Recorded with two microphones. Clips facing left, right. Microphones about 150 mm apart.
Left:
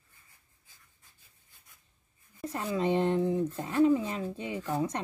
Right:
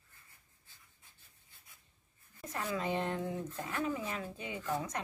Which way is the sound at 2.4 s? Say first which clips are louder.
Left 6 dB; 25° left (ahead or behind).